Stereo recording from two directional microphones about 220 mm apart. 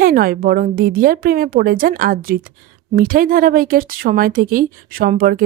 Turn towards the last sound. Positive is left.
turn(degrees=-40)  # may be behind; listen again after turning